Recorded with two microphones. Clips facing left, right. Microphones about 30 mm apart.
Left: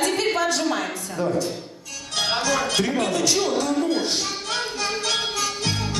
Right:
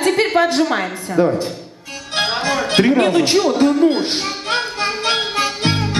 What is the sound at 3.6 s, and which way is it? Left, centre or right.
Music, right.